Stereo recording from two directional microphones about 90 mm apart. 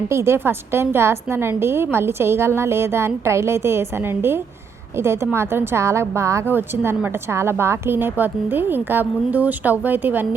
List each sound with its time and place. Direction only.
0.1 s a woman's voice: 30° right (ahead or behind)
6.5 s a woman's voice: 20° right (ahead or behind)